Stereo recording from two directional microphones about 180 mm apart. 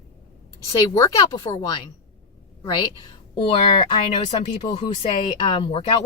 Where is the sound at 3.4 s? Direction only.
30° left (ahead or behind).